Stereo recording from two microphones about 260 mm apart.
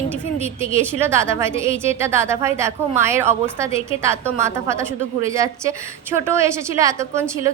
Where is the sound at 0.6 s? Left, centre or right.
Centre.